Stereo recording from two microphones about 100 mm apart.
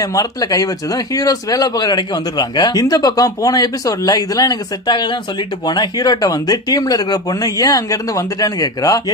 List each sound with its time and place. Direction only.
0.0 s speech: 35° left (ahead or behind)